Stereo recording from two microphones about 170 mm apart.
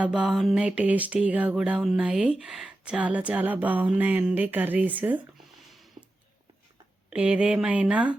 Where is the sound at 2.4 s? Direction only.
Centre (ahead or behind).